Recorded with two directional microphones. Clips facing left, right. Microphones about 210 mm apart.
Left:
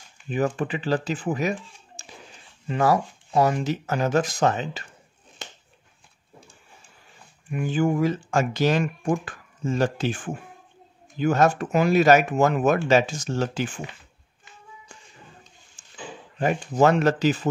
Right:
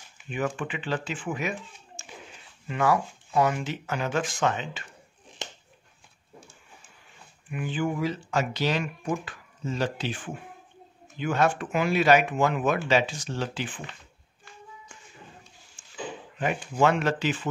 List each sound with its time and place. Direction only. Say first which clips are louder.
0.3 s speech: left 5 dB; 35° left (ahead or behind)
2.0 s a sound: left 1 dB; 35° left (ahead or behind)
2.7 s speech: left 3 dB; 35° left (ahead or behind)
7.5 s speech: left 6 dB; 45° left (ahead or behind)
15.8 s a sound: even; 40° left (ahead or behind)
16.3 s speech: left 5 dB; 40° left (ahead or behind)